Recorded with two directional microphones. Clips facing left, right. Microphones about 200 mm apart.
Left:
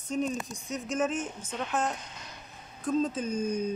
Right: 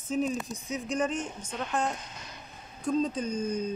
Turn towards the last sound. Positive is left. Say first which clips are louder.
# left 1 dB
turn(degrees=10)  # may be behind; listen again after turning